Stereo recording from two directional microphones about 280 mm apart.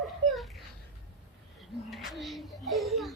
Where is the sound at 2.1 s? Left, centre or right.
Centre.